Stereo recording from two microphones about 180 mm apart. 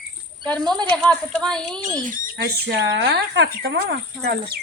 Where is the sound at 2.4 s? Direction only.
65° right (ahead or behind).